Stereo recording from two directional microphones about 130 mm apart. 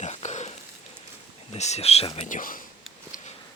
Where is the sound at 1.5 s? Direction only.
55° left (ahead or behind).